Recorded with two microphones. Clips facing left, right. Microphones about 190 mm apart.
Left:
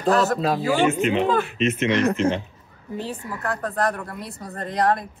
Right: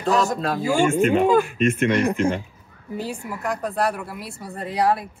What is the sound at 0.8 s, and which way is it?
Speech, 50° right (ahead or behind).